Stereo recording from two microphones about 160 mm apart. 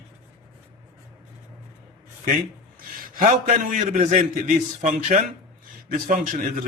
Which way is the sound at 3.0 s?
60° right (ahead or behind).